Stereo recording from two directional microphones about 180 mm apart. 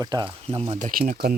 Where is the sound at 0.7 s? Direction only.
45° right (ahead or behind).